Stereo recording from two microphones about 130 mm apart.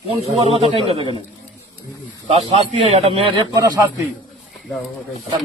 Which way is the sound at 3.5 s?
30° right (ahead or behind).